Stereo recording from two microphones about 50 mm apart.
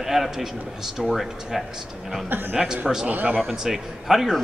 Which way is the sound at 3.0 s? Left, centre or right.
Right.